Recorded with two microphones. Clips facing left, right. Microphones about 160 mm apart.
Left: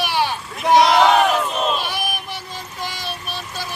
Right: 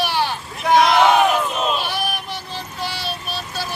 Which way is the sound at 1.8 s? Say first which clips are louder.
Right 1 dB; 15° left (ahead or behind).